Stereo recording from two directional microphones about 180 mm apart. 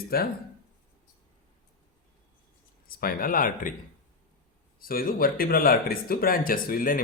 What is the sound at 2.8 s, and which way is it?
Speech, 55° left (ahead or behind).